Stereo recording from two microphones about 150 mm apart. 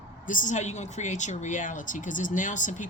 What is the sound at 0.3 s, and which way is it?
Speech, 60° left (ahead or behind).